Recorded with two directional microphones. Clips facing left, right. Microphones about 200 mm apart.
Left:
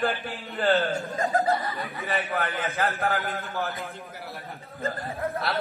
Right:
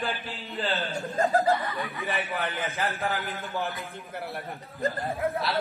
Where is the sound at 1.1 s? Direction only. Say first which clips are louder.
Right 3 dB; 35° right (ahead or behind).